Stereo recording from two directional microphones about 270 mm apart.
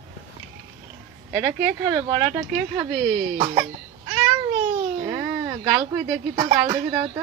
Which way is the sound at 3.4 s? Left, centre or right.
Centre.